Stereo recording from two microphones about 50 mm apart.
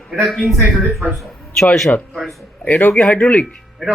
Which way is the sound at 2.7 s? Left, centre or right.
Left.